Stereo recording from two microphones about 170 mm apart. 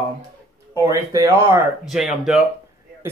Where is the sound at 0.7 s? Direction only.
20° right (ahead or behind).